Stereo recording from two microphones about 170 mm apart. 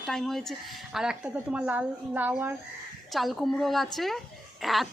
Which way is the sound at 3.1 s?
Centre (ahead or behind).